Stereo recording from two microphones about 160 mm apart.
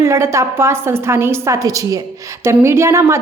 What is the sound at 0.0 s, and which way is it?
A woman's voice, 15° right (ahead or behind).